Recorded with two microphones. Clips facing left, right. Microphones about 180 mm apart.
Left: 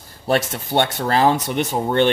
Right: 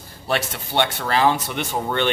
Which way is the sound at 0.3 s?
45° left (ahead or behind).